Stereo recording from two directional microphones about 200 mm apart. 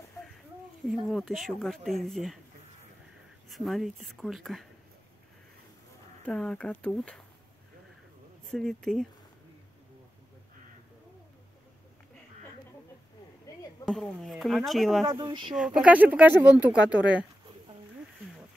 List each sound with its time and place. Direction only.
0.8 s speech: centre (ahead or behind)
3.4 s speech: centre (ahead or behind)
6.2 s speech: 5° left (ahead or behind)
8.5 s speech: centre (ahead or behind)
13.8 s speech: centre (ahead or behind)
15.0 s speech: 20° right (ahead or behind)
15.5 s speech: 5° right (ahead or behind)